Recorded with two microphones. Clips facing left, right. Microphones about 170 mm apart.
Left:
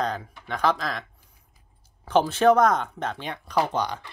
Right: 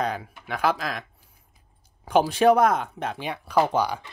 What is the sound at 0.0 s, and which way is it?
Speech, 10° right (ahead or behind).